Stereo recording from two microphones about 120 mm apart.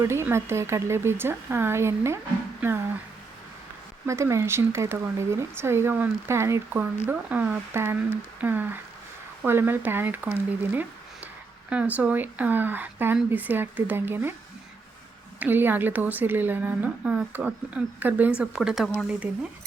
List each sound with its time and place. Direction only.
0.0 s speech: 20° right (ahead or behind)
4.0 s a woman's voice: 25° right (ahead or behind)
15.4 s a woman's voice: 15° right (ahead or behind)